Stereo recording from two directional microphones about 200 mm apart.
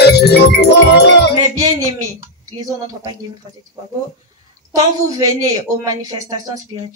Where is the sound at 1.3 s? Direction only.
20° right (ahead or behind).